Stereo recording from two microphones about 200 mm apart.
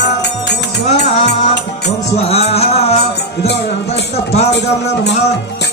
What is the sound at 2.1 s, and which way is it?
Music, 30° left (ahead or behind).